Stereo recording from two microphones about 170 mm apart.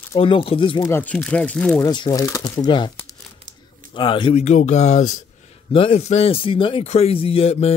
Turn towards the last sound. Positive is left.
turn(degrees=35)  # may be behind; listen again after turning